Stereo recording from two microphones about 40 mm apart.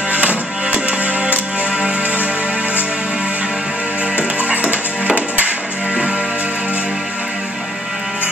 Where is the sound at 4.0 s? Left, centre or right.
Right.